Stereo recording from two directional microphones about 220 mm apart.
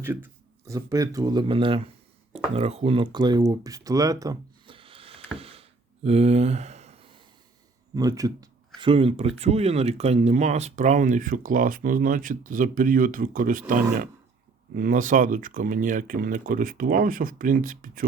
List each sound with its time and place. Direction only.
0.0 s speech: 10° right (ahead or behind)
5.4 s a sound: 25° right (ahead or behind)
7.9 s speech: 15° right (ahead or behind); by 18.0 s 40° right (ahead or behind)